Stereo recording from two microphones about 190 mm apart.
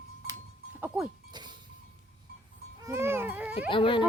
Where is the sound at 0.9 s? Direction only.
10° right (ahead or behind).